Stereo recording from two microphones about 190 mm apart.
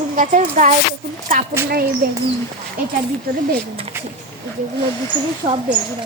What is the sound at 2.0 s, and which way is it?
Speech, 50° right (ahead or behind).